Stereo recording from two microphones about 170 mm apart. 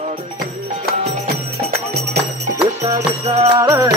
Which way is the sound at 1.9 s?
75° right (ahead or behind).